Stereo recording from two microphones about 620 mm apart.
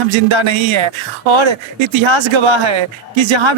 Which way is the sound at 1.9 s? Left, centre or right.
Right.